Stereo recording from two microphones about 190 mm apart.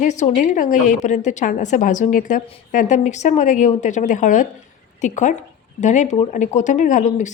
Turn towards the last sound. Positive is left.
turn(degrees=40)  # may be behind; listen again after turning